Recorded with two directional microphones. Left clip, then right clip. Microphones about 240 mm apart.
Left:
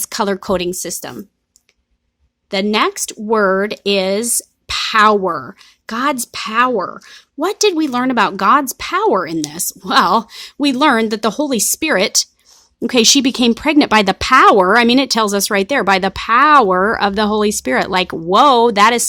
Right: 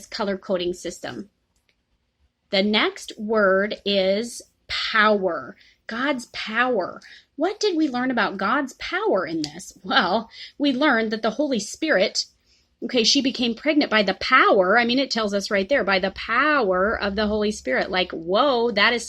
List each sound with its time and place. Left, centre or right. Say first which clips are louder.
0.1 s speech: left 7 dB; left
2.5 s speech: left 5 dB; left